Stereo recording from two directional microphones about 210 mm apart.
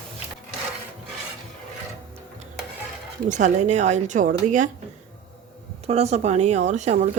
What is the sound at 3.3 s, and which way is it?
A woman's voice, 35° right (ahead or behind).